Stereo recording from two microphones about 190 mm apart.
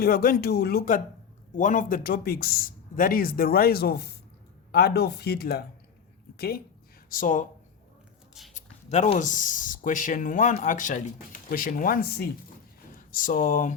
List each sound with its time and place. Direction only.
0.0 s speech: 50° left (ahead or behind)
7.1 s speech: 45° left (ahead or behind)
8.5 s speech: 35° left (ahead or behind); by 12.3 s 55° left (ahead or behind)
13.0 s speech: 45° left (ahead or behind)